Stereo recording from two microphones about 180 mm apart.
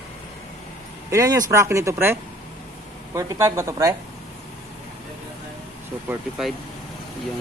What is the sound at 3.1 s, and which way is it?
Speech, 15° right (ahead or behind).